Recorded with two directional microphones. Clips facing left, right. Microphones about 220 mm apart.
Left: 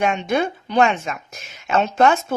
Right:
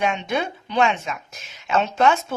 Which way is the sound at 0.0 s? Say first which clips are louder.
Left 4 dB; 45° left (ahead or behind).